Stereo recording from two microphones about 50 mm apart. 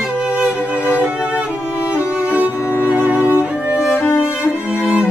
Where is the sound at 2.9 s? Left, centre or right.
Right.